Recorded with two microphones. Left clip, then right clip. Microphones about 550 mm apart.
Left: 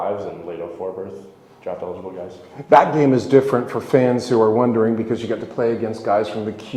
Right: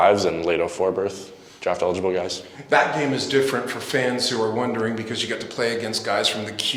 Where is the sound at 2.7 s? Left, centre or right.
Left.